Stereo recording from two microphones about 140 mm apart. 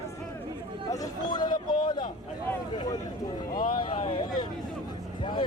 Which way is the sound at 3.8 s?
35° left (ahead or behind).